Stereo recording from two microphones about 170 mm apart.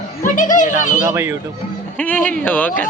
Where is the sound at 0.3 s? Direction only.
50° left (ahead or behind).